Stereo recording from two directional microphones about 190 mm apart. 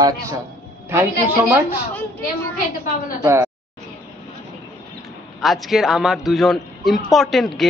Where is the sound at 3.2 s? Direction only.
15° right (ahead or behind).